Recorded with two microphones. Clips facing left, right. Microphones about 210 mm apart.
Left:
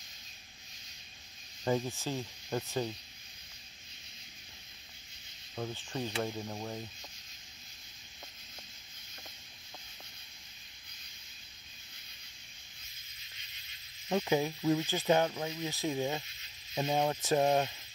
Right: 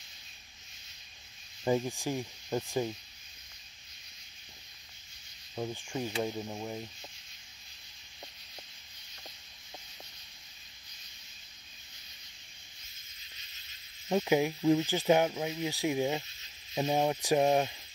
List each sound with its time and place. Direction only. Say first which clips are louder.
1.6 s speech: right 2 dB; 15° right (ahead or behind)
5.6 s speech: right 2 dB; 15° right (ahead or behind)
14.0 s speech: right 3 dB; 15° right (ahead or behind)